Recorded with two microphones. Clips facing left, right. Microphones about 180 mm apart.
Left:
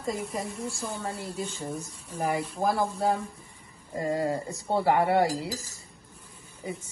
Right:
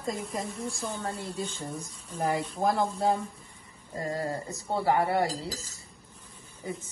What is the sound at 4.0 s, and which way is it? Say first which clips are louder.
Speech: left 4 dB; 20° left (ahead or behind).